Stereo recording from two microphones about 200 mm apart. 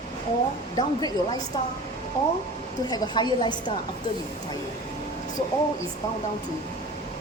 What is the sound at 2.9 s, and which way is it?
Speech, 20° left (ahead or behind).